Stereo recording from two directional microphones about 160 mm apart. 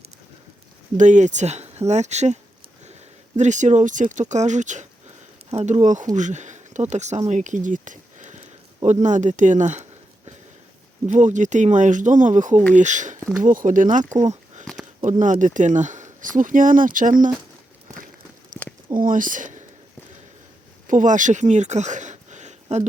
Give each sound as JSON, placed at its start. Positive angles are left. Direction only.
{"t": 0.9, "sound": "speech", "side_deg": -50}
{"t": 6.1, "sound": "a sound", "side_deg": -50}
{"t": 6.9, "sound": "speech", "side_deg": -45}
{"t": 11.0, "sound": "speech", "side_deg": -50}
{"t": 18.9, "sound": "speech", "side_deg": -55}
{"t": 20.8, "sound": "speech", "side_deg": -50}